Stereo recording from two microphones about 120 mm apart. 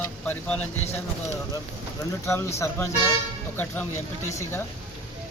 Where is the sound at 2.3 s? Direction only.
25° left (ahead or behind).